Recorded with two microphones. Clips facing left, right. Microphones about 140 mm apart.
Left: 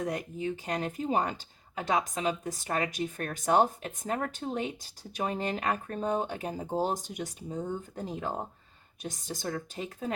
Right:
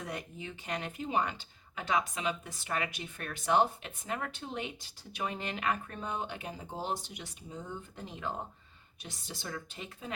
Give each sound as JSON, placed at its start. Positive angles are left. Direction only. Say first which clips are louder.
{"t": 0.0, "sound": "speech", "louder": "left 8 dB", "side_deg": 40}